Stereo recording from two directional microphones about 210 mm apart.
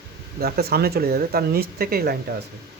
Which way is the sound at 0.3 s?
45° right (ahead or behind).